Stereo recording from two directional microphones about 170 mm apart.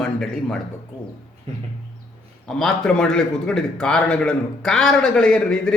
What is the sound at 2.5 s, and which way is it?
A man's voice, 5° left (ahead or behind).